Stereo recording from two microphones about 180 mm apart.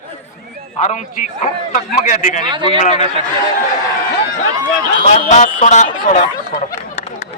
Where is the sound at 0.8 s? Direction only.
40° left (ahead or behind).